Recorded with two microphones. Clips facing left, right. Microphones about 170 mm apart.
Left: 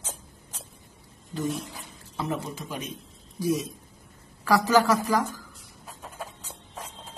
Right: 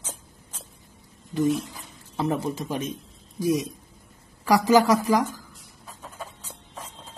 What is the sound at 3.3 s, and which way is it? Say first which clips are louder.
Speech: right 3 dB; 15° right (ahead or behind).